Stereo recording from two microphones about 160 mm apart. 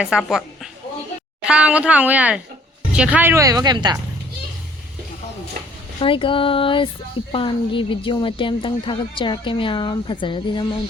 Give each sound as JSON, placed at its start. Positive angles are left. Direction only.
{"t": 0.0, "sound": "a woman's voice", "side_deg": -5}
{"t": 6.0, "sound": "speech", "side_deg": 35}